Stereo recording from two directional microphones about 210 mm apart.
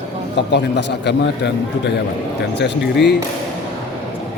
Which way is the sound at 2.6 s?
50° left (ahead or behind).